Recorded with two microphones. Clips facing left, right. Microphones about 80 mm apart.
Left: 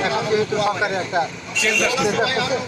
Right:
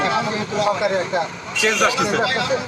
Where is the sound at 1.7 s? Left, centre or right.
Right.